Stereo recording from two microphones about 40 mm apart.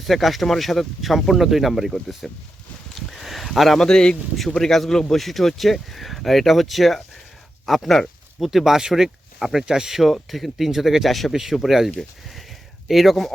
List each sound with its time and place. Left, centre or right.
0.0 s speech: centre
2.9 s a sound: centre
3.8 s speech: centre